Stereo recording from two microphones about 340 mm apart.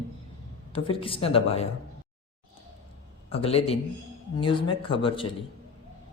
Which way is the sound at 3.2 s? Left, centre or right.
Centre.